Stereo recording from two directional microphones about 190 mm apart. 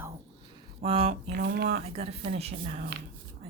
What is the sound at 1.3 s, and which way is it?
Speech, 60° right (ahead or behind).